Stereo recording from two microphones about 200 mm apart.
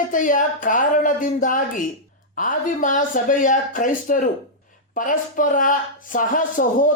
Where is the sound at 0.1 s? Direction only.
40° left (ahead or behind).